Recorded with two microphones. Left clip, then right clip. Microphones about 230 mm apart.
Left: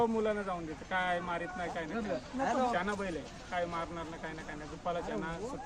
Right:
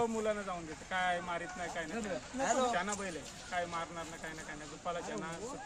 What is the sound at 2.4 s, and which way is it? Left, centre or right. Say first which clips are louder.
Speech: even; right.